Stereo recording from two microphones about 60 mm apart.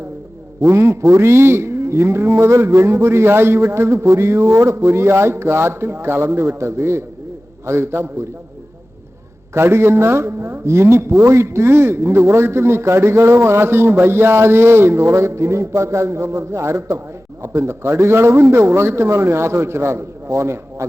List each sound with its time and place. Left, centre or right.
0.6 s speech: right
9.6 s speech: right